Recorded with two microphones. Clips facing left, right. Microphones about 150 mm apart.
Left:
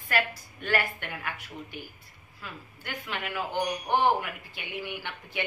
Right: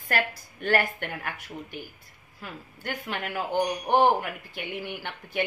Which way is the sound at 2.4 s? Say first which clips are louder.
Right 5 dB; 45° right (ahead or behind).